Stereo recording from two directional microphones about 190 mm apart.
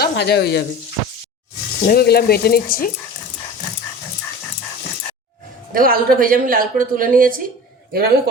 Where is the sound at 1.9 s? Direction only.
55° left (ahead or behind).